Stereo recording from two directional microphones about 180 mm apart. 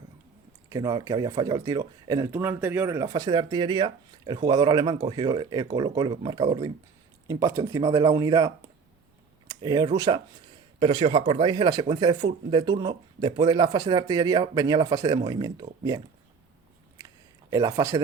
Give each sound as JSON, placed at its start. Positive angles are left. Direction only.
{"t": 0.7, "sound": "speech", "side_deg": -20}
{"t": 17.5, "sound": "speech", "side_deg": -20}